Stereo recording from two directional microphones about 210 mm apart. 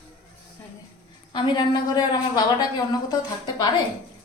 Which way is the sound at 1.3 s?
20° left (ahead or behind).